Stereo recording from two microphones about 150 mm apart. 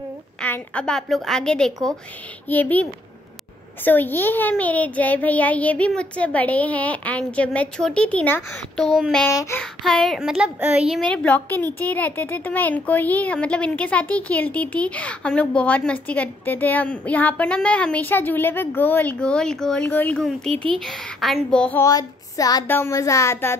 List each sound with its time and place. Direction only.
0.4 s a child's voice: 10° left (ahead or behind)
9.3 s speech: 25° left (ahead or behind)
9.6 s a child's voice: 5° left (ahead or behind)
11.1 s a child's voice: 10° left (ahead or behind)
21.8 s speech: 25° left (ahead or behind)